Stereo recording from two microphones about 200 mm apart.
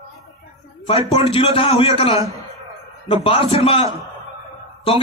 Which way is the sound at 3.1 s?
25° left (ahead or behind).